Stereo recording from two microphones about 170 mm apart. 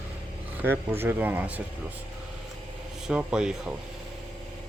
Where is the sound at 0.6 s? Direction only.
10° right (ahead or behind).